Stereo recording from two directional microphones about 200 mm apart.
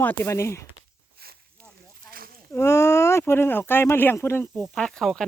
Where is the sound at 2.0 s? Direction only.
45° right (ahead or behind).